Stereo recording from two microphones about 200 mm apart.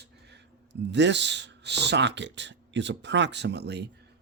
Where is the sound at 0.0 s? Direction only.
55° right (ahead or behind).